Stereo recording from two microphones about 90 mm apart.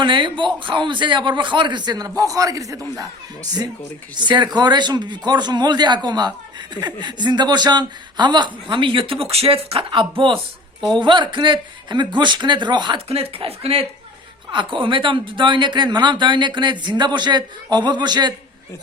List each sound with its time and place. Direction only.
0.0 s speech: 60° right (ahead or behind); by 3.1 s 40° right (ahead or behind)
4.2 s speech: 55° right (ahead or behind); by 10.8 s 75° right (ahead or behind)
10.9 s speech: 60° right (ahead or behind); by 13.8 s 90° right
14.5 s speech: 65° right (ahead or behind)